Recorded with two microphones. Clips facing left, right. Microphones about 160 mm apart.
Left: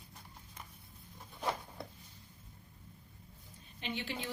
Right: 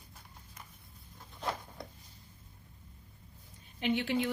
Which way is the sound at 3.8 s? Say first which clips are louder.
Right 9 dB; 60° right (ahead or behind).